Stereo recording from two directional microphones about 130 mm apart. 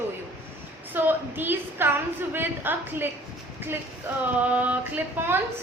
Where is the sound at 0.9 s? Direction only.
15° right (ahead or behind).